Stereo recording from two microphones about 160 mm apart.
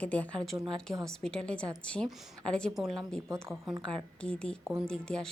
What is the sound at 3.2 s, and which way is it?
Speech, 15° right (ahead or behind).